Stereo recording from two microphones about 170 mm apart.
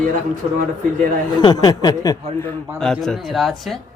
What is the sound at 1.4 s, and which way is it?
Speech, 25° left (ahead or behind).